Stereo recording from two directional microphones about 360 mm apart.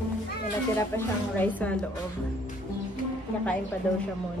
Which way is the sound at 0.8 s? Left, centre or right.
Centre.